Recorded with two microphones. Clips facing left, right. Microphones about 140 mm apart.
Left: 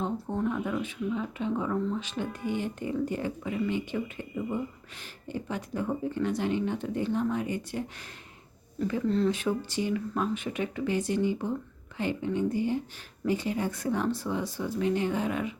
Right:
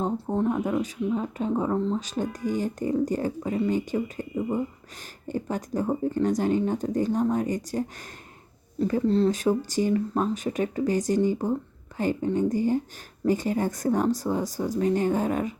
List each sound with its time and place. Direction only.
0.0 s speech: 35° right (ahead or behind)